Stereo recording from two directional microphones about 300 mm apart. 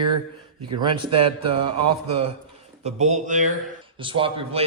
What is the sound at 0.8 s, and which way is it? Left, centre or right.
A man's voice, centre.